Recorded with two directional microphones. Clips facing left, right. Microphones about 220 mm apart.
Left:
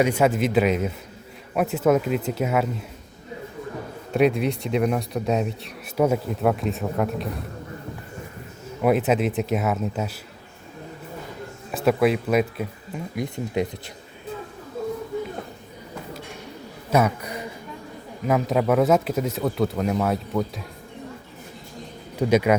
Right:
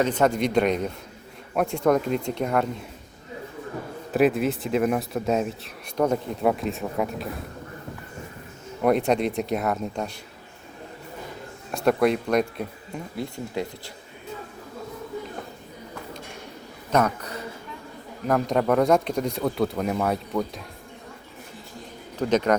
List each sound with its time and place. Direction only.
0.0 s speech: 10° left (ahead or behind)
4.1 s speech: centre (ahead or behind)
8.8 s speech: 5° left (ahead or behind)
11.7 s speech: centre (ahead or behind)
13.1 s speech: 20° left (ahead or behind)
16.9 s a man's voice: 10° left (ahead or behind)
22.2 s a man's voice: 10° left (ahead or behind)